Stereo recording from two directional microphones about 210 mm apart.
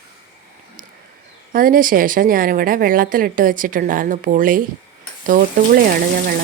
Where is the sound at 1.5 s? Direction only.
40° right (ahead or behind).